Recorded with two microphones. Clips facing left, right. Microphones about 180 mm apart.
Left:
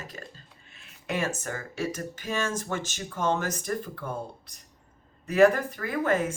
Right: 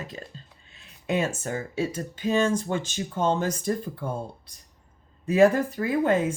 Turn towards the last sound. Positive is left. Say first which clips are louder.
# right 4 dB
turn(degrees=-25)  # may be behind; listen again after turning